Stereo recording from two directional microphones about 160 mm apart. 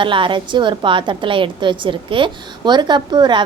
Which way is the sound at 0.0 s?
30° right (ahead or behind).